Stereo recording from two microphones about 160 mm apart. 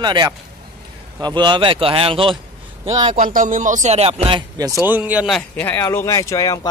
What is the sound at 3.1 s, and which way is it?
Speech, 60° right (ahead or behind).